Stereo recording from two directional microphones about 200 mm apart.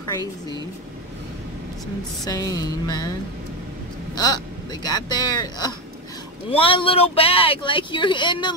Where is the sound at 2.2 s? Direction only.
15° left (ahead or behind).